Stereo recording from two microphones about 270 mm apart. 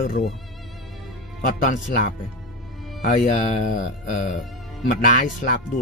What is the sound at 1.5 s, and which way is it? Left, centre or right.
Speech, left.